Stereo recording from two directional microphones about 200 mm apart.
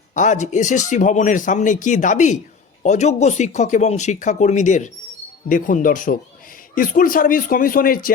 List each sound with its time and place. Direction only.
0.1 s speech: 40° left (ahead or behind)